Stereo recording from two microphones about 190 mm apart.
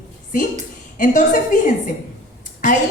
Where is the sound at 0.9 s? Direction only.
45° left (ahead or behind).